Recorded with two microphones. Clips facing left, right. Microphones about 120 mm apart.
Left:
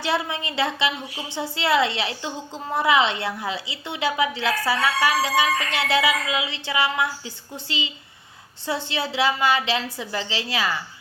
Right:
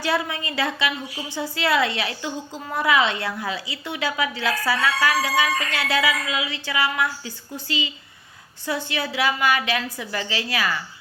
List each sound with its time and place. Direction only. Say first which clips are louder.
0.0 s a woman's voice: right 1 dB; 20° left (ahead or behind)